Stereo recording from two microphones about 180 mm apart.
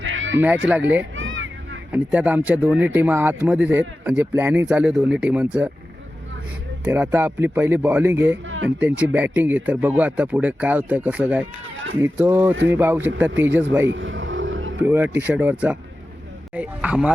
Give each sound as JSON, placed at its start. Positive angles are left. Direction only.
{"t": 0.0, "sound": "music", "side_deg": -90}
{"t": 0.3, "sound": "speech", "side_deg": -5}
{"t": 1.1, "sound": "a sound", "side_deg": -90}
{"t": 1.9, "sound": "speech", "side_deg": -5}
{"t": 6.8, "sound": "speech", "side_deg": -10}
{"t": 8.4, "sound": "a sound", "side_deg": -90}
{"t": 9.0, "sound": "speech", "side_deg": -10}
{"t": 13.8, "sound": "vehicle", "side_deg": -90}
{"t": 14.8, "sound": "speech", "side_deg": -5}